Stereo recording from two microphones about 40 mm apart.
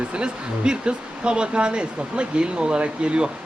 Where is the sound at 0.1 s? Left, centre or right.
Right.